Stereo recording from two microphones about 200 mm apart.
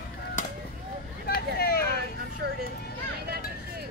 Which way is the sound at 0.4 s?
40° left (ahead or behind).